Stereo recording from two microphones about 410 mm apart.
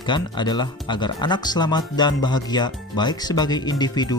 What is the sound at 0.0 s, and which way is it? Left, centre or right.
Speech, centre.